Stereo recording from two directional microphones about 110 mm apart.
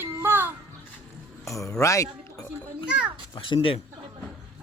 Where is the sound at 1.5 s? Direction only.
30° left (ahead or behind).